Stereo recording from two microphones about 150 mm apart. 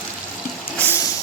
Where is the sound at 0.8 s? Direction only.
15° left (ahead or behind).